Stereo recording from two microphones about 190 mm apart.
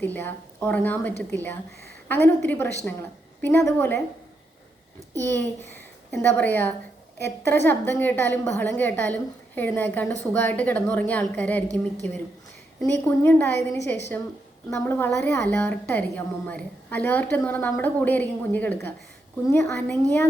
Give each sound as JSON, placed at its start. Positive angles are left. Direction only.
{"t": 0.0, "sound": "a woman's voice", "side_deg": 10}
{"t": 5.2, "sound": "a child's voice", "side_deg": 10}
{"t": 12.8, "sound": "a woman's voice", "side_deg": 10}
{"t": 13.7, "sound": "a woman's voice", "side_deg": 65}
{"t": 14.7, "sound": "a woman's voice", "side_deg": 10}